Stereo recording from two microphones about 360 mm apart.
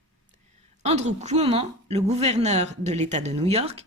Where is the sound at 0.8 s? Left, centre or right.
Centre.